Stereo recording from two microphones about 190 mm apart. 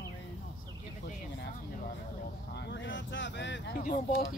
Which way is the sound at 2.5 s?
65° left (ahead or behind).